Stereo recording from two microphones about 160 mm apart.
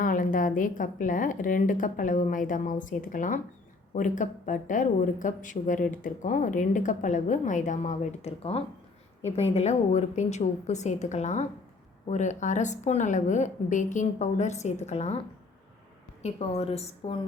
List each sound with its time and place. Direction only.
0.0 s a woman's voice: 55° left (ahead or behind)
16.2 s a woman's voice: 40° left (ahead or behind)